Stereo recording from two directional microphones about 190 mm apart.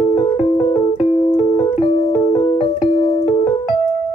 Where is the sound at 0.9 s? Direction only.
40° left (ahead or behind).